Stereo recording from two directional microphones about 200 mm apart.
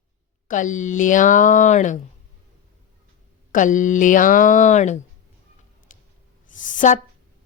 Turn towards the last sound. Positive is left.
turn(degrees=40)  # may be behind; listen again after turning